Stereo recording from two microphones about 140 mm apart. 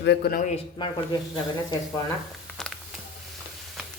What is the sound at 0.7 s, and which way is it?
Speech, 35° left (ahead or behind).